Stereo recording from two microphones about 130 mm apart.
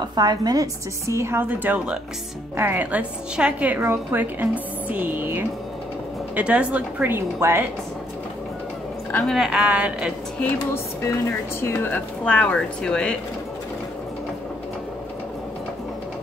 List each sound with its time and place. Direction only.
0.1 s a woman's voice: 30° right (ahead or behind)
9.3 s a woman's voice: 5° right (ahead or behind)
10.4 s speech: 20° left (ahead or behind)